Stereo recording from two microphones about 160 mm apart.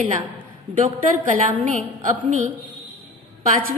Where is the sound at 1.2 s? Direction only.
55° right (ahead or behind).